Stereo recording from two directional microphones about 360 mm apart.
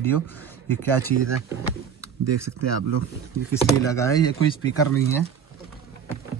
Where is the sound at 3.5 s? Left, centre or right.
Centre.